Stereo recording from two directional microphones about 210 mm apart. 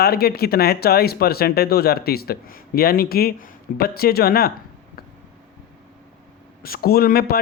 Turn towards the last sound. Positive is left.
turn(degrees=45)  # may be behind; listen again after turning